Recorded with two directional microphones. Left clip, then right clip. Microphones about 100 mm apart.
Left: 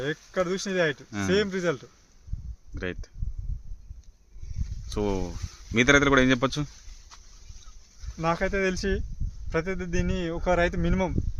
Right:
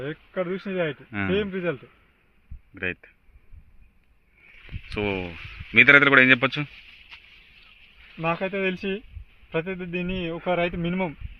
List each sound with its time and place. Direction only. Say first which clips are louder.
0.0 s speech: left 2 dB; 45° left (ahead or behind)
0.4 s a man's voice: left 2 dB; 30° left (ahead or behind)
4.9 s a man's voice: right 2 dB; 35° left (ahead or behind)
8.2 s speech: even; 5° left (ahead or behind)